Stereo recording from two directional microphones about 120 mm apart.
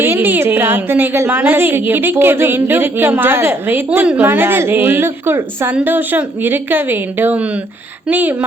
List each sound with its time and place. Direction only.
0.0 s a woman's voice: 20° right (ahead or behind)